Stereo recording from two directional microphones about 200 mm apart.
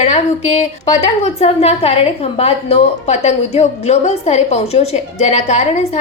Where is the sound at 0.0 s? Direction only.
35° left (ahead or behind).